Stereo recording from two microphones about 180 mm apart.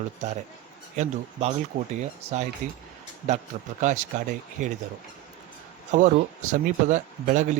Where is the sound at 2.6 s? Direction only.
45° right (ahead or behind).